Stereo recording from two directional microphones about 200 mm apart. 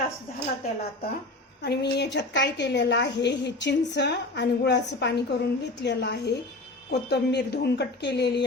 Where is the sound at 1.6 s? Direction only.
55° left (ahead or behind).